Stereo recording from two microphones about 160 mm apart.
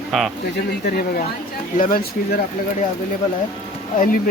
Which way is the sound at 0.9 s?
75° left (ahead or behind).